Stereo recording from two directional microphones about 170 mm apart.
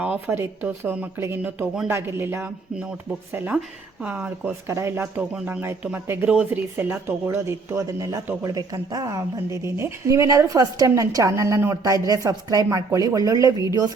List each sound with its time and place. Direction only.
0.0 s speech: 10° right (ahead or behind)